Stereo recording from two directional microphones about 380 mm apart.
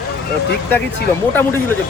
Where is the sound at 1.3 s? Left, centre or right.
Centre.